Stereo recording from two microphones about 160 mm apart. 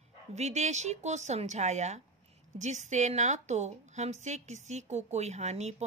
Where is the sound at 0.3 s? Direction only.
45° right (ahead or behind).